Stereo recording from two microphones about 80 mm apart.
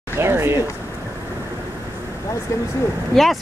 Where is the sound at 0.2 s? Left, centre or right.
Right.